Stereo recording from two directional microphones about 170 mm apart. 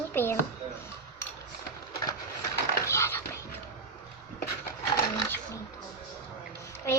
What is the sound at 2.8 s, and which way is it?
Dog, 15° left (ahead or behind).